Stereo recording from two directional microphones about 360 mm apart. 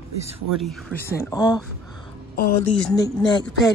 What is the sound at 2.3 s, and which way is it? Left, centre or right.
Speech, left.